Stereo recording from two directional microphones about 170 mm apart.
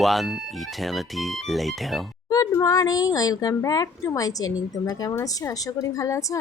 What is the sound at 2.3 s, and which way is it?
A woman's voice, 20° left (ahead or behind).